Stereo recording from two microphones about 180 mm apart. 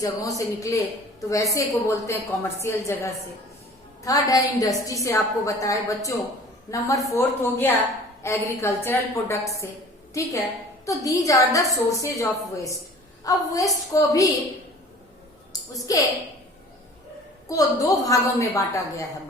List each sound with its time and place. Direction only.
0.0 s a woman's voice: 20° left (ahead or behind)
10.8 s a woman's voice: 20° left (ahead or behind)
15.9 s a woman's voice: 20° left (ahead or behind)
17.5 s a woman's voice: 20° left (ahead or behind)